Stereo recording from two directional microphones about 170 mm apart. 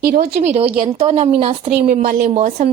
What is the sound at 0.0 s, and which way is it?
Speech, 60° right (ahead or behind).